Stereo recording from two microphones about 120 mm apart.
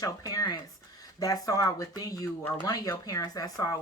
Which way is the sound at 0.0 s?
30° left (ahead or behind).